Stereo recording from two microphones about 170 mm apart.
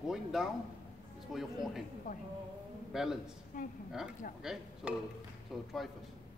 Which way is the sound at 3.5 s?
50° left (ahead or behind).